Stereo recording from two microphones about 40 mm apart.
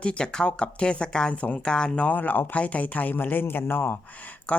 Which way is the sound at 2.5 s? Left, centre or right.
Left.